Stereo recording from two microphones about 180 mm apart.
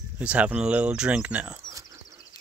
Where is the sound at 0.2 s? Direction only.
10° right (ahead or behind).